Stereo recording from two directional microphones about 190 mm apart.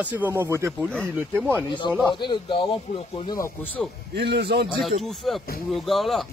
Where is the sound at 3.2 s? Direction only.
15° left (ahead or behind).